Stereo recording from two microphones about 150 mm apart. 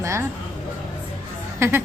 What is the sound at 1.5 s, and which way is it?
Speech, 15° right (ahead or behind).